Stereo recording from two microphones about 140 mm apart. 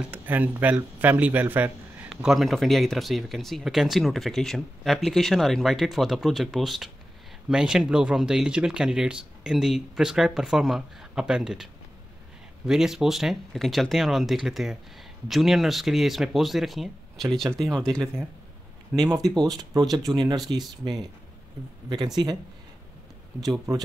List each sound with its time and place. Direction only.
0.1 s a man's voice: 15° right (ahead or behind); by 17.6 s 5° left (ahead or behind)
17.9 s speech: 25° right (ahead or behind)
23.7 s speech: 25° right (ahead or behind)